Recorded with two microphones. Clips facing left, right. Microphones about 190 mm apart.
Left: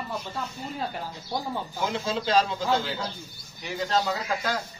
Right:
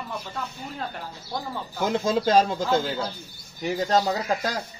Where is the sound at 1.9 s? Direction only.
45° right (ahead or behind).